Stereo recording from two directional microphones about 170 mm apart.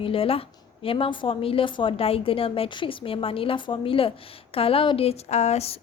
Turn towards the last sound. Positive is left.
turn(degrees=40)  # may be behind; listen again after turning